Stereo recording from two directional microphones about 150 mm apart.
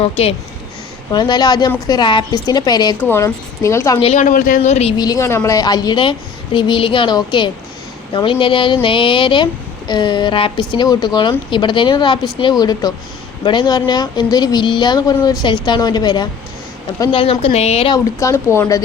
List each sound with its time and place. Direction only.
0.0 s speech: 45° left (ahead or behind)
1.1 s speech: 30° left (ahead or behind)
3.0 s speech: 15° left (ahead or behind)
4.0 s speech: 50° left (ahead or behind)
4.9 s speech: 25° left (ahead or behind)
17.1 s speech: 40° left (ahead or behind)
17.9 s speech: 20° left (ahead or behind)